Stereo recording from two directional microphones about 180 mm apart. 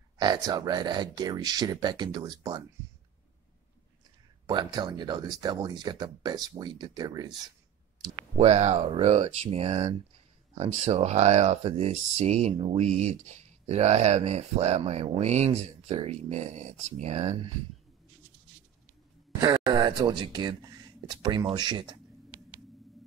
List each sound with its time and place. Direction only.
0.2 s speech: 25° right (ahead or behind)
4.5 s speech: 25° right (ahead or behind)
8.4 s speech: 35° right (ahead or behind)
19.4 s speech: 25° right (ahead or behind)